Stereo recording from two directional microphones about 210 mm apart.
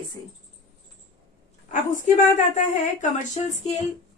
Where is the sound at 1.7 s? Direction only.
35° left (ahead or behind).